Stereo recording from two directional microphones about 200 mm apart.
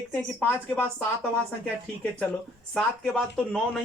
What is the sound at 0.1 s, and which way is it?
A man's voice, 5° left (ahead or behind).